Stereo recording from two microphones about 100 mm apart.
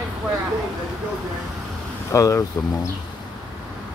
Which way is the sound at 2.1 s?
30° left (ahead or behind).